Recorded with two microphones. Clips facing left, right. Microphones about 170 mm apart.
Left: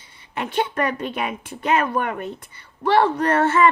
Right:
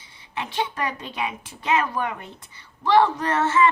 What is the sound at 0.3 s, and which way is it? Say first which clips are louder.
A woman's voice: left 4 dB; 55° left (ahead or behind).